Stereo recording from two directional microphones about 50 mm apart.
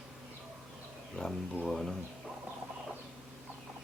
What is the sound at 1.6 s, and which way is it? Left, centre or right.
Speech, centre.